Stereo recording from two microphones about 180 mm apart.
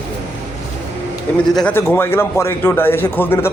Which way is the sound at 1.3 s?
5° left (ahead or behind).